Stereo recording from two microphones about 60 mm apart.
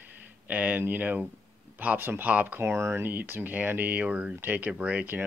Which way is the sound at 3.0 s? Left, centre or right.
Right.